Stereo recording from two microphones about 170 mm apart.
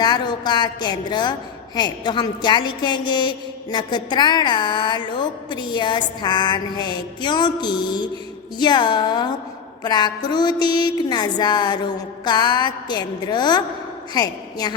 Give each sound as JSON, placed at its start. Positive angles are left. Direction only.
{"t": 0.0, "sound": "a woman's voice", "side_deg": 25}